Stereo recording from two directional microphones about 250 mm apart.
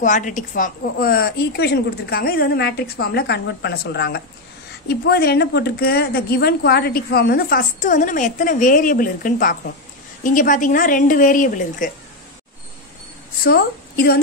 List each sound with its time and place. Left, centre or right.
0.0 s a woman's voice: left
13.4 s a woman's voice: left